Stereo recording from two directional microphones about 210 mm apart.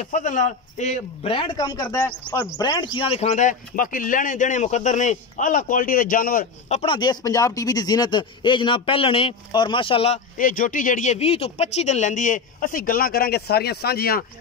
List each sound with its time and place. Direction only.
0.0 s a man's voice: 35° left (ahead or behind)
6.8 s a man's voice: 25° left (ahead or behind); by 14.2 s 45° left (ahead or behind)